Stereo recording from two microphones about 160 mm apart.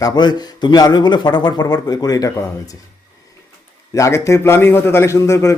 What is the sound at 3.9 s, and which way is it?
A man's voice, 20° left (ahead or behind).